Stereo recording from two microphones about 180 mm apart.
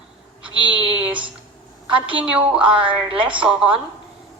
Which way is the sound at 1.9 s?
30° right (ahead or behind).